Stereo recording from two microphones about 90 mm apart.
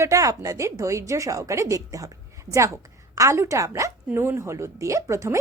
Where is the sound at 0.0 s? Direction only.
40° right (ahead or behind).